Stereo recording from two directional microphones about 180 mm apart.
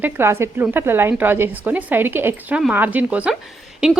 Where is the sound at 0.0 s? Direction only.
15° right (ahead or behind).